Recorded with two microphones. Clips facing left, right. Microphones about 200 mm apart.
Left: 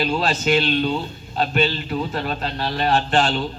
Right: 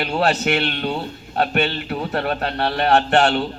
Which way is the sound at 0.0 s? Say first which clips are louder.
Right 2 dB; 65° right (ahead or behind).